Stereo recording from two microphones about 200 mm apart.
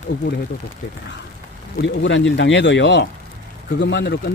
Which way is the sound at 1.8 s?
65° left (ahead or behind).